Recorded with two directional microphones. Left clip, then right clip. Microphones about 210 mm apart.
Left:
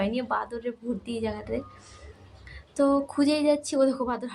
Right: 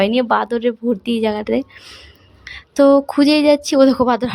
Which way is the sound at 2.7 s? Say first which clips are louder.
Right 12 dB; 45° right (ahead or behind).